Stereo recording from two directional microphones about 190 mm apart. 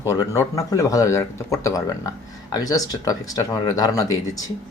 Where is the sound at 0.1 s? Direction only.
15° left (ahead or behind).